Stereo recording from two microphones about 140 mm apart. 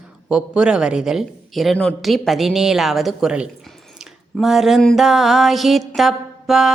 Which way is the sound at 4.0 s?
Centre (ahead or behind).